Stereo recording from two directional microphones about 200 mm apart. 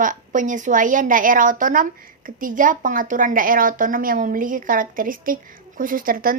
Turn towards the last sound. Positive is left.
turn(degrees=-45)  # may be behind; listen again after turning